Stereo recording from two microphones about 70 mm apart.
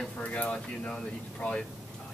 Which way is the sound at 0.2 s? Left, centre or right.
Centre.